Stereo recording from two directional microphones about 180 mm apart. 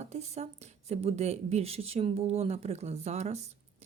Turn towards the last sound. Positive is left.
turn(degrees=-35)  # may be behind; listen again after turning